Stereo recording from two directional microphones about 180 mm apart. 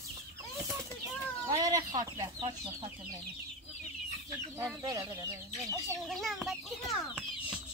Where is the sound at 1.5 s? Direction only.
20° right (ahead or behind).